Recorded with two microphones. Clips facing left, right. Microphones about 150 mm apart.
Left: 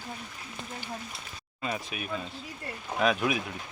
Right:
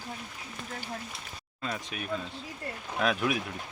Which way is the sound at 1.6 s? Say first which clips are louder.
Left 2 dB; 10° left (ahead or behind).